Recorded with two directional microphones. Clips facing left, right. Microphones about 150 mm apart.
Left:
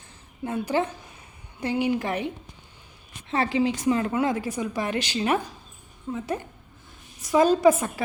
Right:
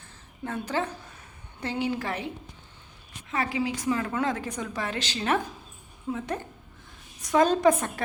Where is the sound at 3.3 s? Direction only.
25° left (ahead or behind).